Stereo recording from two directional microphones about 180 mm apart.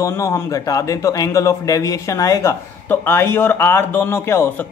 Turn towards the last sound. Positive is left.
turn(degrees=15)  # may be behind; listen again after turning